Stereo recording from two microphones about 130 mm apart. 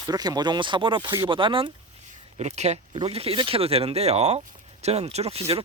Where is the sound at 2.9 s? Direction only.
45° right (ahead or behind).